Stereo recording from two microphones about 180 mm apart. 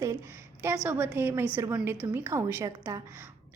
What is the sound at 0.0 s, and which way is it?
A woman's voice, 15° right (ahead or behind).